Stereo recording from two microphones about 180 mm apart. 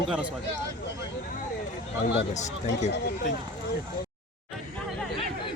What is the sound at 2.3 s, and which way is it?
Speech, 40° left (ahead or behind).